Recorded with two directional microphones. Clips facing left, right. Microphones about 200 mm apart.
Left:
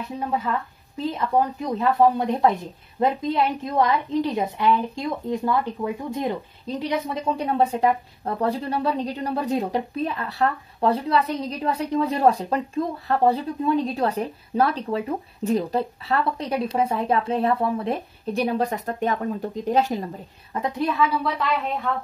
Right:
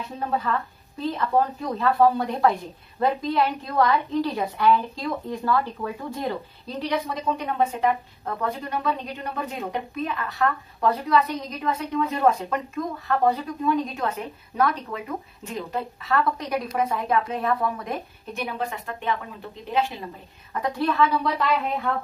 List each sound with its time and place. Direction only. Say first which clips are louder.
1.1 s a woman's voice: even; 15° left (ahead or behind); by 20.1 s 40° left (ahead or behind)
20.6 s a woman's voice: even; 20° left (ahead or behind)
20.9 s speech: right 1 dB; 5° left (ahead or behind)